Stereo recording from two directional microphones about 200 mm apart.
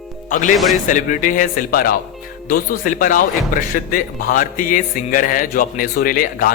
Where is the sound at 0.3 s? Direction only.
40° left (ahead or behind).